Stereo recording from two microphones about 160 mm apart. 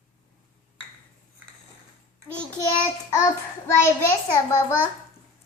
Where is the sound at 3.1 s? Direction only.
15° left (ahead or behind).